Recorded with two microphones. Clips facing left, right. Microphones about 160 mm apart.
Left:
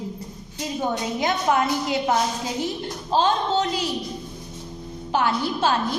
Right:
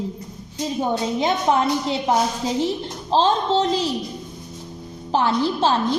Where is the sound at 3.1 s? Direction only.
30° right (ahead or behind).